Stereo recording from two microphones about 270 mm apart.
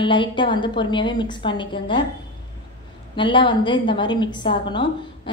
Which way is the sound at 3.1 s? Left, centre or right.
Centre.